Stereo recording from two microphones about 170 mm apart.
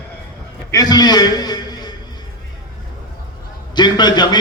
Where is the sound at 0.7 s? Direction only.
25° left (ahead or behind).